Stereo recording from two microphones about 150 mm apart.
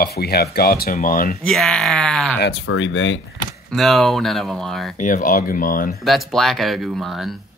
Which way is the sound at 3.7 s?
Centre (ahead or behind).